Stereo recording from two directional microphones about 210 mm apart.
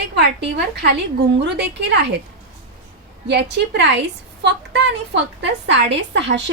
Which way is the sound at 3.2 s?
55° right (ahead or behind).